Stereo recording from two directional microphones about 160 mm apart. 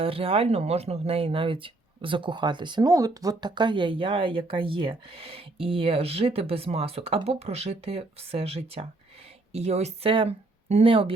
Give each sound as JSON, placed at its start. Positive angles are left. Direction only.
{"t": 0.0, "sound": "speech", "side_deg": -35}